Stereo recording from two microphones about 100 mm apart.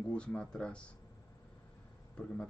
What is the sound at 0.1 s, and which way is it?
Speech, 10° left (ahead or behind).